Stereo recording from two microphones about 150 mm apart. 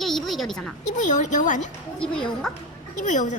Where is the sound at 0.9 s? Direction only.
55° left (ahead or behind).